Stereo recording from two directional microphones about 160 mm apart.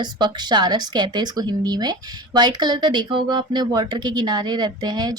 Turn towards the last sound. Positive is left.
turn(degrees=-25)  # may be behind; listen again after turning